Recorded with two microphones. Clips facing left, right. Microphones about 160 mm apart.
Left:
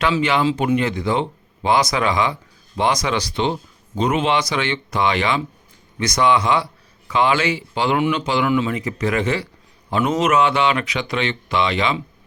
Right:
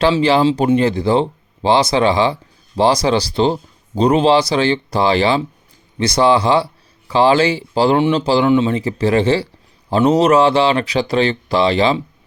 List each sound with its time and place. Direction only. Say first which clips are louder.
0.0 s speech: right 5 dB; 30° right (ahead or behind)